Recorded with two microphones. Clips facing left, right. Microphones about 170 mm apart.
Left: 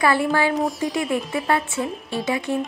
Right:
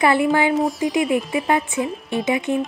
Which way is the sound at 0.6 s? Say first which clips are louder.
Right 3 dB; centre (ahead or behind).